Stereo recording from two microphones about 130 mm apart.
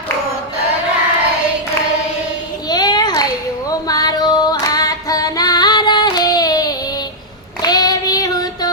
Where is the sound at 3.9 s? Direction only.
30° left (ahead or behind).